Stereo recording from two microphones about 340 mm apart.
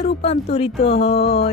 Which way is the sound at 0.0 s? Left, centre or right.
Centre.